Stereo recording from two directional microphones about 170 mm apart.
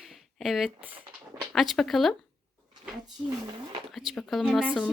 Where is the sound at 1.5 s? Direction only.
Centre (ahead or behind).